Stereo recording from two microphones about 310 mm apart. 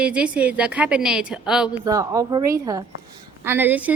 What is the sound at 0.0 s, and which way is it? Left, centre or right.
A woman's voice, centre.